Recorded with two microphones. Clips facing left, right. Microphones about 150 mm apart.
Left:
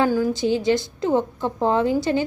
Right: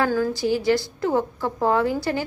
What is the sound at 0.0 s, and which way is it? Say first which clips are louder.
A woman's voice: left 2 dB; 15° left (ahead or behind).